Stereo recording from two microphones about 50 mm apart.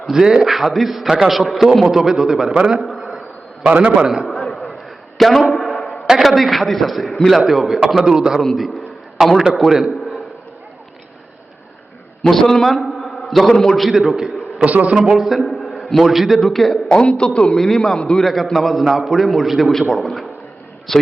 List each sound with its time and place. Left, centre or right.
0.1 s a man's voice: centre
2.8 s a sound: centre
3.6 s a man's voice: right
3.9 s a man's voice: centre
5.1 s a man's voice: centre
5.5 s a sound: centre
6.1 s a man's voice: centre
8.4 s a man's voice: centre
12.2 s a man's voice: centre
13.8 s a man's voice: centre
14.6 s a man's voice: right
15.0 s a man's voice: centre
16.9 s a man's voice: centre
18.2 s a man's voice: centre